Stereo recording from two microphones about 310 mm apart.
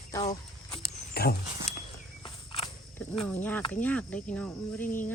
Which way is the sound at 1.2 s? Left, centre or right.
Left.